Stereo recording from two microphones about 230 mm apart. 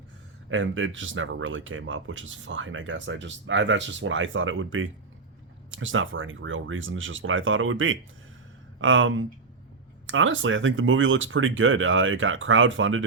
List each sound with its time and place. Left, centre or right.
0.5 s speech: right